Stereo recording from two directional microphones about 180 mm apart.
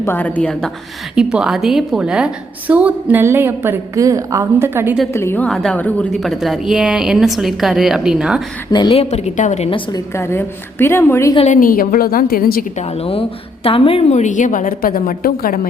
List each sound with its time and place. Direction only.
0.0 s a woman's voice: 10° left (ahead or behind)
1.1 s a woman's voice: 5° right (ahead or behind)
5.1 s a woman's voice: 15° left (ahead or behind); by 8.4 s 5° right (ahead or behind)
8.7 s a woman's voice: 30° left (ahead or behind)
9.6 s a woman's voice: 30° left (ahead or behind)
10.2 s a woman's voice: 15° left (ahead or behind)
11.3 s a woman's voice: 40° left (ahead or behind)
13.7 s a woman's voice: 30° left (ahead or behind); by 15.6 s 55° left (ahead or behind)